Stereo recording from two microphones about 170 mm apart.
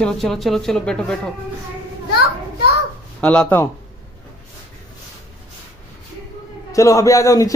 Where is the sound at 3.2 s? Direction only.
10° left (ahead or behind).